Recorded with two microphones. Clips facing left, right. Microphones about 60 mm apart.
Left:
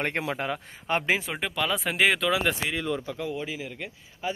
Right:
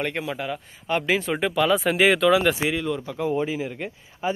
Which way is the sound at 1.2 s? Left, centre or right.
Centre.